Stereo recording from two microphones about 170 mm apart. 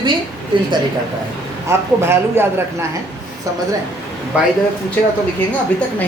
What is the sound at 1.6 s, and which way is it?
Speech, 15° right (ahead or behind).